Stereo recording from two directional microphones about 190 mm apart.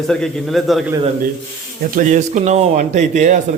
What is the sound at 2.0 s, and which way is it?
Speech, 40° right (ahead or behind).